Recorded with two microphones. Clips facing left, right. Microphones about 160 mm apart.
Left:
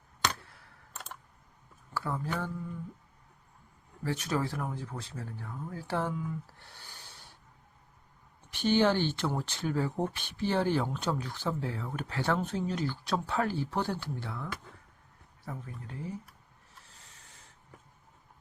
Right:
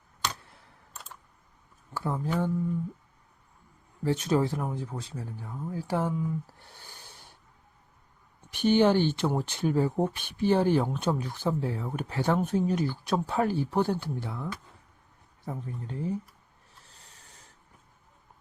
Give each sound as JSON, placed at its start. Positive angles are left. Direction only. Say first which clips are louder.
{"t": 1.9, "sound": "speech", "louder": "right 4 dB", "side_deg": -20}
{"t": 4.0, "sound": "speech", "louder": "right 6 dB", "side_deg": -25}
{"t": 8.5, "sound": "speech", "louder": "right 4 dB", "side_deg": -15}